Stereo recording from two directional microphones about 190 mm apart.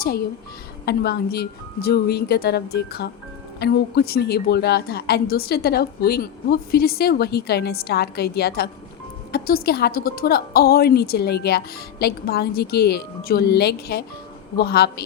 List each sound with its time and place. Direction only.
0.0 s a woman's voice: 55° left (ahead or behind)